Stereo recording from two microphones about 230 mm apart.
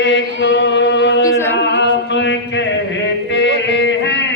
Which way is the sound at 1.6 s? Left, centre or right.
Left.